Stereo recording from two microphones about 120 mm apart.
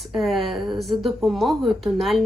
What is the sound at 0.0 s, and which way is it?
A woman's voice, centre (ahead or behind).